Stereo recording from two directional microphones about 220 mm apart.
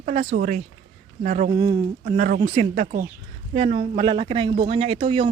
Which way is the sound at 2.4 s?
30° right (ahead or behind).